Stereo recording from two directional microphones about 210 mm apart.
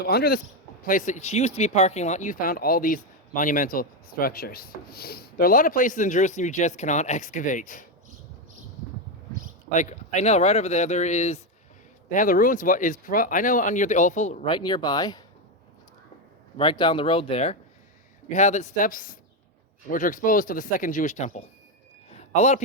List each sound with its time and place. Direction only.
0.1 s speech: 45° left (ahead or behind)
9.7 s speech: 35° left (ahead or behind)
14.5 s speech: 20° left (ahead or behind)
16.6 s speech: 25° left (ahead or behind)
22.1 s a sound: 30° left (ahead or behind)